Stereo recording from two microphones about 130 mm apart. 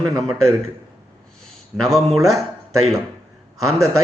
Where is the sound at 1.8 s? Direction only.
5° left (ahead or behind).